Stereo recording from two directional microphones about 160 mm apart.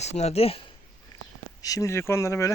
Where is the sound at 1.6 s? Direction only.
20° left (ahead or behind).